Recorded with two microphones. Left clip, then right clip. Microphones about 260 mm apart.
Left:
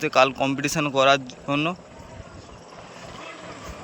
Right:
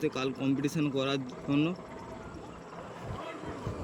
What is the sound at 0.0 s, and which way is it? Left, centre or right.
Speech, centre.